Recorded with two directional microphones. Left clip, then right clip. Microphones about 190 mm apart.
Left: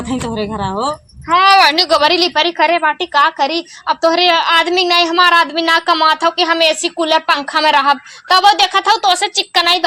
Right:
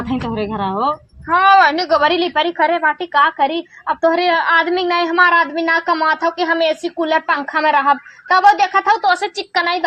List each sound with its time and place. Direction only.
0.1 s speech: 45° left (ahead or behind)
1.3 s a woman's voice: 25° left (ahead or behind)